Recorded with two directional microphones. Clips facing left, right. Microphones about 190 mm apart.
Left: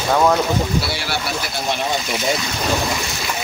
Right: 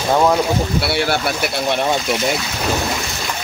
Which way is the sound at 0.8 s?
60° right (ahead or behind).